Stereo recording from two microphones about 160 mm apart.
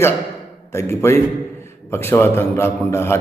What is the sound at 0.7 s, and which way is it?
A man's voice, 15° left (ahead or behind).